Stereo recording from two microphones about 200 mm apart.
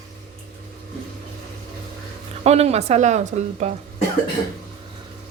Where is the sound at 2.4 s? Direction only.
30° right (ahead or behind).